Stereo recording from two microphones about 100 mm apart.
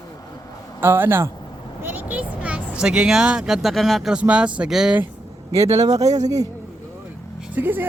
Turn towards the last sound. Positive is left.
turn(degrees=-20)  # may be behind; listen again after turning